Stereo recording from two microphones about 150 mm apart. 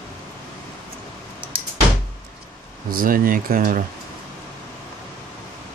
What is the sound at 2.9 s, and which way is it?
Speech, 70° right (ahead or behind).